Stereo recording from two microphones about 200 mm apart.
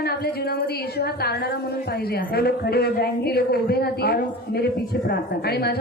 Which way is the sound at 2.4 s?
50° left (ahead or behind).